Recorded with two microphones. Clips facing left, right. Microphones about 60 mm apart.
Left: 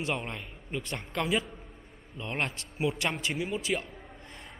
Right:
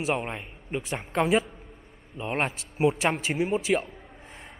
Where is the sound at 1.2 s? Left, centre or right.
Right.